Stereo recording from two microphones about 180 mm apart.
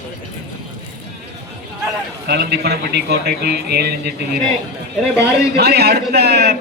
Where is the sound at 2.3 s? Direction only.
60° right (ahead or behind).